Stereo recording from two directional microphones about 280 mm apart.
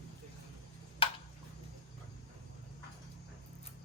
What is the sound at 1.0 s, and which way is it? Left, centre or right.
Tick-tock, centre.